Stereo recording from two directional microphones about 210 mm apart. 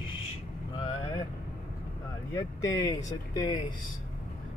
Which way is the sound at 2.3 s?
15° left (ahead or behind).